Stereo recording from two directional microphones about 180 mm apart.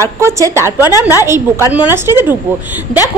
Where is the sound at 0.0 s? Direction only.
15° right (ahead or behind).